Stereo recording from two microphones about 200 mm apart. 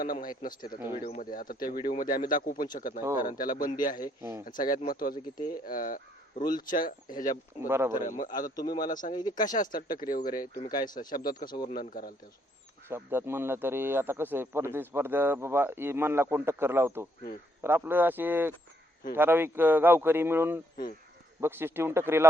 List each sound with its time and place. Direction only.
0.0 s speech: 45° left (ahead or behind)
4.2 s speech: 15° right (ahead or behind)
4.4 s speech: 45° left (ahead or behind)
7.7 s speech: 10° right (ahead or behind)
8.0 s speech: 40° left (ahead or behind)
8.5 s speech: 20° left (ahead or behind)
8.9 s speech: 40° left (ahead or behind)
10.5 s speech: 20° left (ahead or behind)
10.9 s speech: 45° left (ahead or behind)
12.9 s speech: 10° right (ahead or behind)